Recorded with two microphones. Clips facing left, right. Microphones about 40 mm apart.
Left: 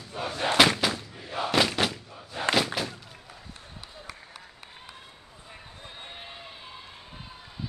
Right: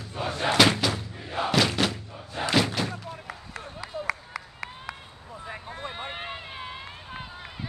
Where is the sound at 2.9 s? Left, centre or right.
Right.